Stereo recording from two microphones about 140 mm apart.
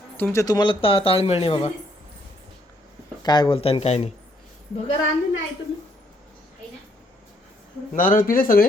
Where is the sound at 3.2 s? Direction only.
30° left (ahead or behind); by 4.1 s 50° left (ahead or behind).